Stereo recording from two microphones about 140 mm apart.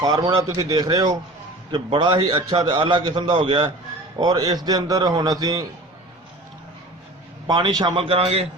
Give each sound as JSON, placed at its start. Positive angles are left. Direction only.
{"t": 0.0, "sound": "a man's voice", "side_deg": -30}
{"t": 7.4, "sound": "a man's voice", "side_deg": -30}